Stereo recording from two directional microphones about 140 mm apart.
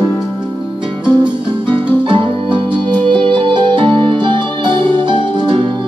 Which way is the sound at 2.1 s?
35° right (ahead or behind).